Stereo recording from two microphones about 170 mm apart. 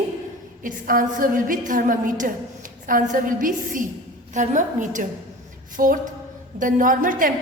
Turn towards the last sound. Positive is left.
turn(degrees=-50)  # may be behind; listen again after turning